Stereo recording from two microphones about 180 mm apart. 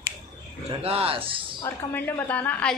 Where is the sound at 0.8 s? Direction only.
35° right (ahead or behind).